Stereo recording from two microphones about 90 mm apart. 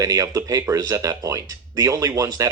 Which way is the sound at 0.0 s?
40° right (ahead or behind).